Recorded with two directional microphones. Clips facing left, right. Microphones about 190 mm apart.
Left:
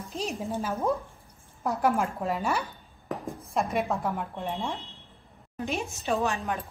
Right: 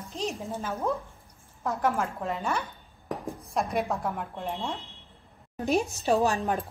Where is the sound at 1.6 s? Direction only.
15° left (ahead or behind).